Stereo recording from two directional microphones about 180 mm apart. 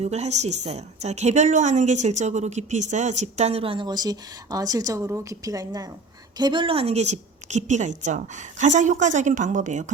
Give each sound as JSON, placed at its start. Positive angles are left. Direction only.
{"t": 0.0, "sound": "a woman's voice", "side_deg": -40}